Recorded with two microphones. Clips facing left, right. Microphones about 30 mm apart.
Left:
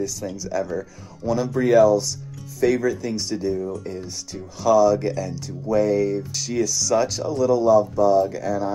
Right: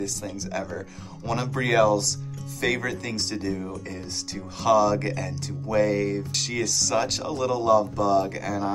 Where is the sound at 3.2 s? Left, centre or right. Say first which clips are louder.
Left 4 dB; right.